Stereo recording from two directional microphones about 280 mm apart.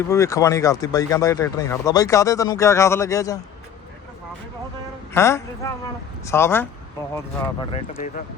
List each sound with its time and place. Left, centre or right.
0.1 s speech: centre
5.1 s speech: centre
7.7 s speech: left